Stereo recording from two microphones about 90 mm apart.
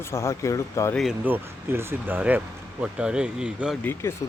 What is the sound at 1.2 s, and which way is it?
Speech, 25° right (ahead or behind).